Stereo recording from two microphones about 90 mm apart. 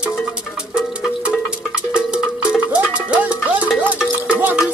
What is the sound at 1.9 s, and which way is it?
Music, 10° right (ahead or behind).